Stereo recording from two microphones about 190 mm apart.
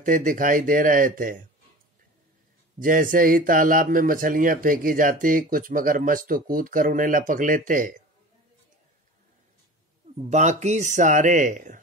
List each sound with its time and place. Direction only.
0.0 s speech: 45° right (ahead or behind)
2.8 s speech: 45° right (ahead or behind)
10.1 s speech: 35° right (ahead or behind)